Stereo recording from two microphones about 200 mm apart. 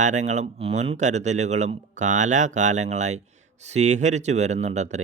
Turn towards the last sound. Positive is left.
turn(degrees=-35)  # may be behind; listen again after turning